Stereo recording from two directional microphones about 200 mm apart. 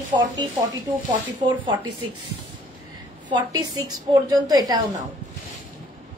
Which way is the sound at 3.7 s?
20° right (ahead or behind).